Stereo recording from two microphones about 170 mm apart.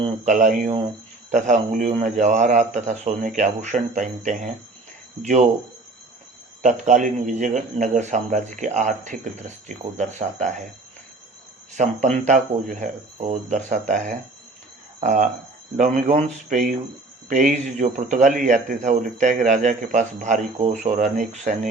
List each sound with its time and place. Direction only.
0.3 s a man's voice: 45° right (ahead or behind)
6.6 s a man's voice: 45° right (ahead or behind)
11.7 s a man's voice: 45° right (ahead or behind)